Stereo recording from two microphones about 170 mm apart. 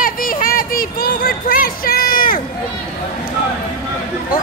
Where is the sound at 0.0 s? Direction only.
55° left (ahead or behind).